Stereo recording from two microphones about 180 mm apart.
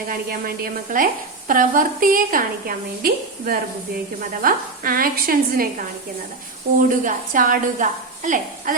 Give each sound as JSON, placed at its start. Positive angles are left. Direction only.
{"t": 0.1, "sound": "a woman's voice", "side_deg": -55}
{"t": 6.7, "sound": "a woman's voice", "side_deg": -50}